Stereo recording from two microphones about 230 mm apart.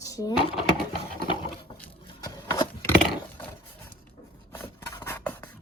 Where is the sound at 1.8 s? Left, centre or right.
Centre.